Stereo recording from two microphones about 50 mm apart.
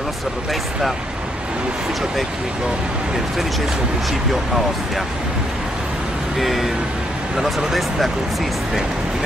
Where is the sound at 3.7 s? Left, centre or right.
Centre.